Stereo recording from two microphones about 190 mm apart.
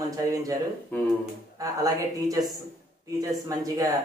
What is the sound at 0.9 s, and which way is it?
Speech, 10° left (ahead or behind).